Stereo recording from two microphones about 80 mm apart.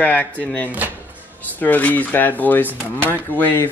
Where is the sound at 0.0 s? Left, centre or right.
Centre.